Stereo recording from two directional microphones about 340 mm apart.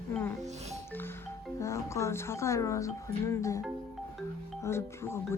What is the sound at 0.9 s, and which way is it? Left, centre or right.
Speech, centre.